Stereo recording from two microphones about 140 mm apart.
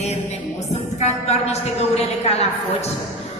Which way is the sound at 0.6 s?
55° left (ahead or behind).